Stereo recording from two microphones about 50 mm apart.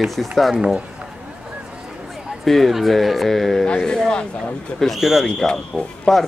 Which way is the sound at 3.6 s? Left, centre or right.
Centre.